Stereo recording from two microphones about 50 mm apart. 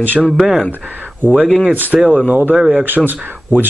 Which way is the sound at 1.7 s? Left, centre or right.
Right.